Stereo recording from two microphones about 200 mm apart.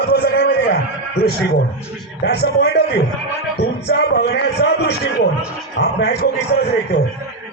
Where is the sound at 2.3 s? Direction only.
55° left (ahead or behind).